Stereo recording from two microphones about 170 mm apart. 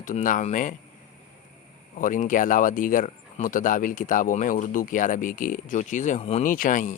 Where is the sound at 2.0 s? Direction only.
50° left (ahead or behind).